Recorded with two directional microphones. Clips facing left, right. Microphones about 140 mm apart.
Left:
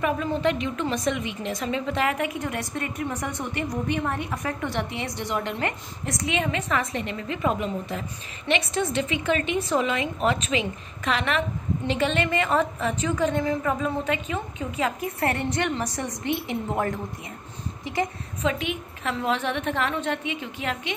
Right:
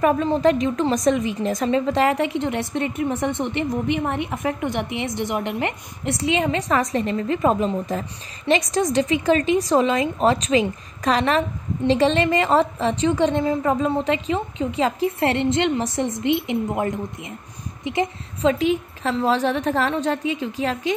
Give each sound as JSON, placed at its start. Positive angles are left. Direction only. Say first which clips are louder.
{"t": 0.0, "sound": "a woman's voice", "louder": "right 6 dB", "side_deg": -40}
{"t": 17.9, "sound": "a woman's voice", "louder": "right 3 dB", "side_deg": -30}